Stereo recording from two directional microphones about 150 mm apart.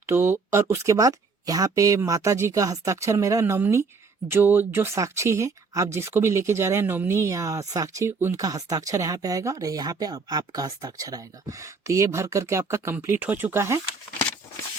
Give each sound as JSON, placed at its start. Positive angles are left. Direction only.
{"t": 0.0, "sound": "speech", "side_deg": -15}